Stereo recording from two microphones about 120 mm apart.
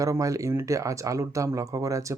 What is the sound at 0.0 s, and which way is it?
Speech, 30° right (ahead or behind).